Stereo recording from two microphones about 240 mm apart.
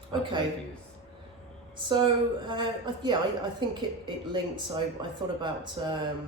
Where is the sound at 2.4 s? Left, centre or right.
Centre.